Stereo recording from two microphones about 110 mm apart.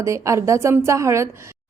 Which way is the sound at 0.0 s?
25° right (ahead or behind).